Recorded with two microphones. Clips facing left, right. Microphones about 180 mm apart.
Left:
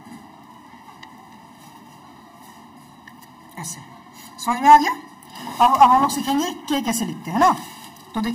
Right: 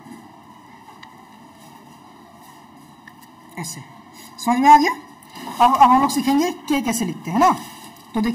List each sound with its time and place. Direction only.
3.5 s a woman's voice: 15° right (ahead or behind)
5.6 s a woman's voice: centre (ahead or behind)